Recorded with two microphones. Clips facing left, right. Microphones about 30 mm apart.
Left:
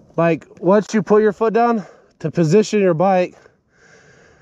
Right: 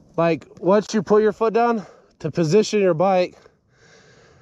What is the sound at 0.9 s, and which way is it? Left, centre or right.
Speech, left.